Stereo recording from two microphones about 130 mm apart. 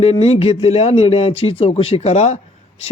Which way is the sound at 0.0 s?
50° left (ahead or behind).